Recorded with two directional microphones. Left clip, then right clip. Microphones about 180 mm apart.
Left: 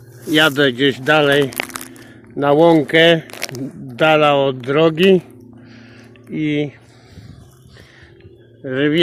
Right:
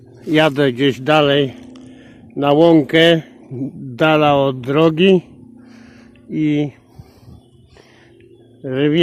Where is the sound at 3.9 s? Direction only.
50° right (ahead or behind).